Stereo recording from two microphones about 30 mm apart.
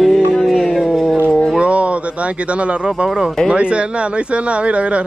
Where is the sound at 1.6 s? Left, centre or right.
Right.